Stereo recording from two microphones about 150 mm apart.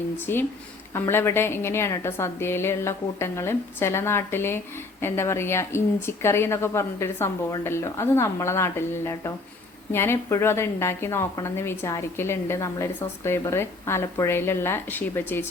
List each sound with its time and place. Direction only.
0.3 s a woman's voice: 15° left (ahead or behind)